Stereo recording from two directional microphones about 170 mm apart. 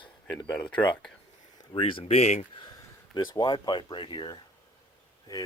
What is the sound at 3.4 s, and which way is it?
Speech, 25° left (ahead or behind).